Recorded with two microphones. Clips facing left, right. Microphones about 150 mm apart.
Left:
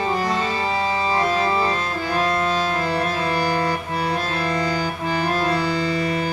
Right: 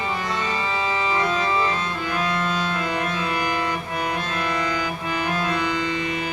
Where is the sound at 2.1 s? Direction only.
35° left (ahead or behind).